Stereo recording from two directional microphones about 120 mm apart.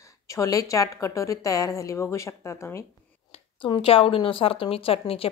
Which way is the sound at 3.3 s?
45° left (ahead or behind).